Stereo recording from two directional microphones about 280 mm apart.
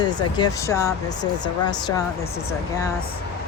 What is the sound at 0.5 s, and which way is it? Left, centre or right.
Speech, centre.